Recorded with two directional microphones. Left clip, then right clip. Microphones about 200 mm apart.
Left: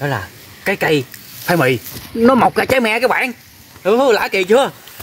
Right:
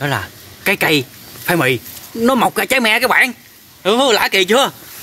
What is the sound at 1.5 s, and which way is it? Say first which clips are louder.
Speech: left 1 dB; 20° left (ahead or behind).